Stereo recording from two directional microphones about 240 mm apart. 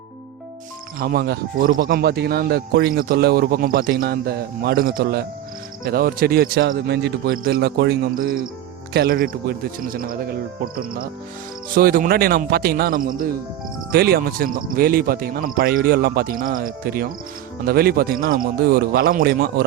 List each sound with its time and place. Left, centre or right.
0.9 s speech: right